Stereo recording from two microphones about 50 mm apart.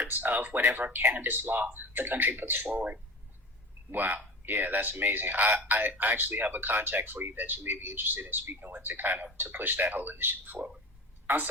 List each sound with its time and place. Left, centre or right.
0.0 s speech: right